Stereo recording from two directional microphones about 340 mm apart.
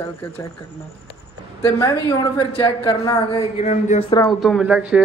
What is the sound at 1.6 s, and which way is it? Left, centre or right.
A woman's voice, centre.